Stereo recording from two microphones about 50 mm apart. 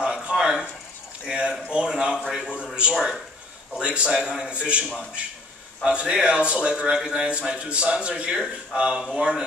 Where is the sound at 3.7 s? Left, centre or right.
Right.